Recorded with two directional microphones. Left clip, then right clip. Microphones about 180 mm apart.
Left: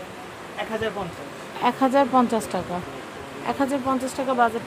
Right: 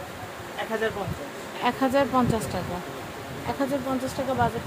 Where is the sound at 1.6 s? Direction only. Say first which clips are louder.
Left 3 dB; 20° left (ahead or behind).